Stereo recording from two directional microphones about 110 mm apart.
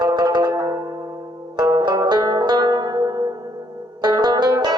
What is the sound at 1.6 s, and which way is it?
Zither, 40° right (ahead or behind).